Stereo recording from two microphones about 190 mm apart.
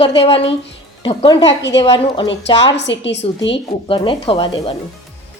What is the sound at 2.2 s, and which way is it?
A woman's voice, 70° left (ahead or behind).